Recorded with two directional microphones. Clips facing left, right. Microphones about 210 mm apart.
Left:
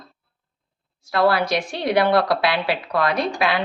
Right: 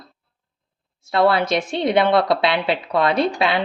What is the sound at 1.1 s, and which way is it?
A woman's voice, 25° right (ahead or behind).